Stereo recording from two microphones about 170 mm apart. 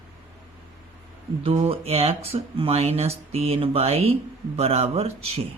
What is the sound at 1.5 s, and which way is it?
Speech, 35° right (ahead or behind).